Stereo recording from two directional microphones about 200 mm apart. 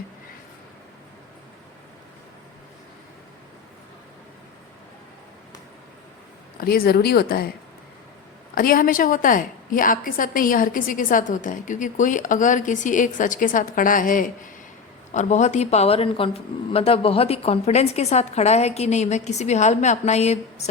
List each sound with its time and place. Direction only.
6.6 s speech: 50° left (ahead or behind)
8.5 s a woman's voice: 45° left (ahead or behind)